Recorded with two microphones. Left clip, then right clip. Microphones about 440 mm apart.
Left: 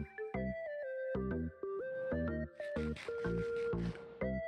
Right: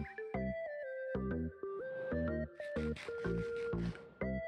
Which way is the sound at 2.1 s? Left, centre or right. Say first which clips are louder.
Right 1 dB; centre.